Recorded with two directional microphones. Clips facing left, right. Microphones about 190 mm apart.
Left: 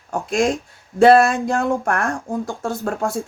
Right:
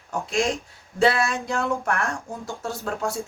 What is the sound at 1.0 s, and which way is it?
A woman's voice, 50° left (ahead or behind).